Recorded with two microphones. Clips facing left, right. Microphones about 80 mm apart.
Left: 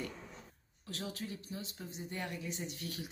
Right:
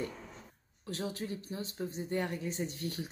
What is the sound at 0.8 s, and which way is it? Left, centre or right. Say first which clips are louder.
Speech: right 5 dB; right.